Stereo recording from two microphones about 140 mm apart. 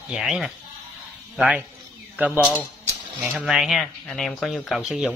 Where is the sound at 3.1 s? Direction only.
5° right (ahead or behind).